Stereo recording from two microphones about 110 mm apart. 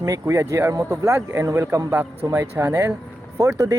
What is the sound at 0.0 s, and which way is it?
A man's voice, 25° right (ahead or behind).